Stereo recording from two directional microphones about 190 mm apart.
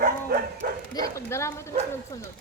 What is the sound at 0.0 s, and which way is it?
Bow-wow, 55° right (ahead or behind).